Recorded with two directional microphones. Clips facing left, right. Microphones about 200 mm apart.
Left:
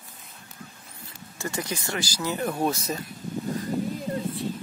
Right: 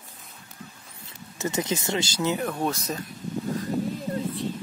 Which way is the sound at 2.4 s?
10° left (ahead or behind).